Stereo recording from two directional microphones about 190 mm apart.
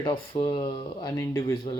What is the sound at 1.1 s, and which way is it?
Speech, 15° left (ahead or behind).